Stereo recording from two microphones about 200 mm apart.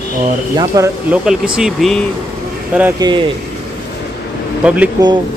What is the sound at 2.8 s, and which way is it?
Speech, 15° right (ahead or behind).